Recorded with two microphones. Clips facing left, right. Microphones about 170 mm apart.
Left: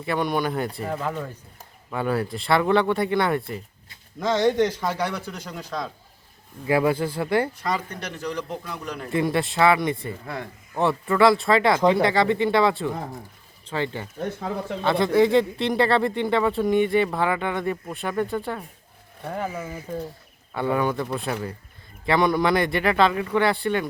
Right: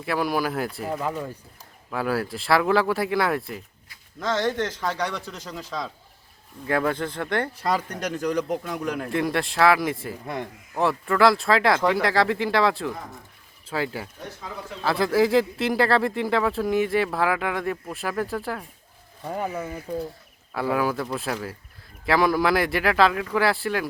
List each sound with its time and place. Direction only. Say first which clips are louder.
0.0 s speech: left 1 dB; centre (ahead or behind)
4.2 s a man's voice: left 4 dB; 15° left (ahead or behind)
7.6 s speech: right 2 dB; 40° right (ahead or behind)
9.0 s speech: left 5 dB; centre (ahead or behind)
14.2 s speech: left 8 dB; 55° left (ahead or behind)
14.8 s speech: left 2 dB; centre (ahead or behind)